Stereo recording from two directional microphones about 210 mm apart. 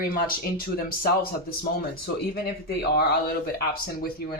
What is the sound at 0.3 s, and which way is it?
Speech, 45° left (ahead or behind).